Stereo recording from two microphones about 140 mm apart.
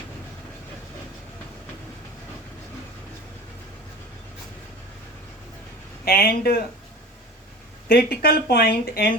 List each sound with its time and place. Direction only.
6.1 s speech: 90° left
7.9 s speech: 90° left